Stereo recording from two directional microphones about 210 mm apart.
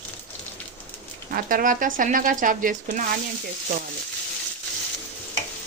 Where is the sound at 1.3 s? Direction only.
45° right (ahead or behind).